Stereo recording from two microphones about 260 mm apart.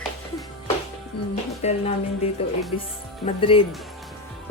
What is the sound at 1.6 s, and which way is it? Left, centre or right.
Speech, left.